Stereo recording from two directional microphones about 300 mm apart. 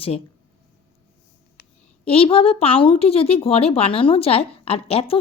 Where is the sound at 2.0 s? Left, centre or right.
Centre.